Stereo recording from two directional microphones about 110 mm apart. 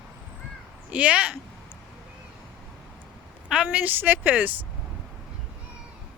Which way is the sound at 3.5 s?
10° right (ahead or behind).